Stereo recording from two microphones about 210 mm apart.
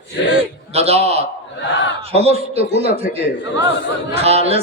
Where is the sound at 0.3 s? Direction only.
30° right (ahead or behind).